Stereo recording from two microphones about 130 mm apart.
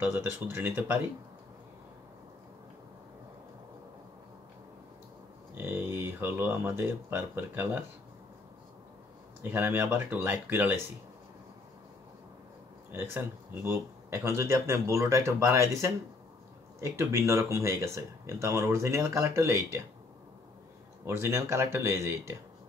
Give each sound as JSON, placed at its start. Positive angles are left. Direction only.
{"t": 0.0, "sound": "speech", "side_deg": -15}
{"t": 5.6, "sound": "speech", "side_deg": -15}
{"t": 9.4, "sound": "speech", "side_deg": -15}
{"t": 12.9, "sound": "speech", "side_deg": -15}
{"t": 21.0, "sound": "speech", "side_deg": -20}